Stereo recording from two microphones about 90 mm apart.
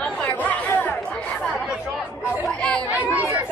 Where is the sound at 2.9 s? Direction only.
15° right (ahead or behind).